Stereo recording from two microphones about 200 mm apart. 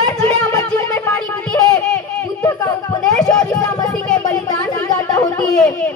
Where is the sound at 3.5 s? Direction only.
15° left (ahead or behind).